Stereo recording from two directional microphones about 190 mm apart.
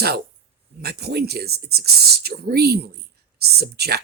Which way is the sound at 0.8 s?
55° right (ahead or behind).